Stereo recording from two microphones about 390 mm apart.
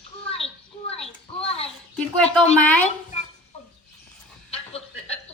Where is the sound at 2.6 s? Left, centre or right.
Centre.